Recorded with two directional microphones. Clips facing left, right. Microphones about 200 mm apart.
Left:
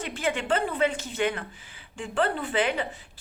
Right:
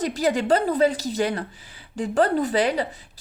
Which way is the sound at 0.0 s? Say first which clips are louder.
Right 7 dB; 40° right (ahead or behind).